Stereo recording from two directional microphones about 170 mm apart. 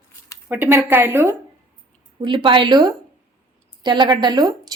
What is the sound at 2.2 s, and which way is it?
Speech, 30° right (ahead or behind).